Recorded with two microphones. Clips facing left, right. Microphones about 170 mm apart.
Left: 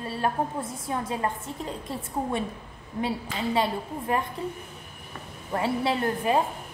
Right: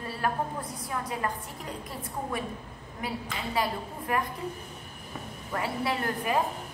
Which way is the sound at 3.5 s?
25° left (ahead or behind).